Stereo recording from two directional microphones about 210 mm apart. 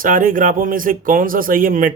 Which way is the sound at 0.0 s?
40° right (ahead or behind).